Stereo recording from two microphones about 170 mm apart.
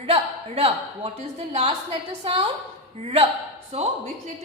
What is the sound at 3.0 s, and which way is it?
Speech, 35° right (ahead or behind).